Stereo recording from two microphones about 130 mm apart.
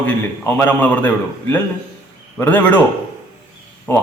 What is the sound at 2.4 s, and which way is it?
Speech, 15° left (ahead or behind).